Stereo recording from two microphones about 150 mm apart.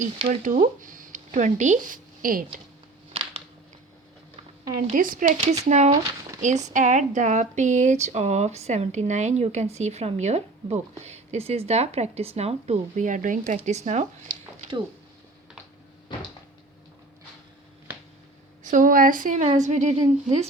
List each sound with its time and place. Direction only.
0.2 s speech: 35° right (ahead or behind)
0.8 s speech: 60° right (ahead or behind)
3.1 s a sound: 40° right (ahead or behind)
4.8 s a woman's voice: 60° right (ahead or behind)
5.6 s speech: 50° right (ahead or behind)
13.5 s speech: 50° right (ahead or behind)
18.6 s a woman's voice: 60° right (ahead or behind)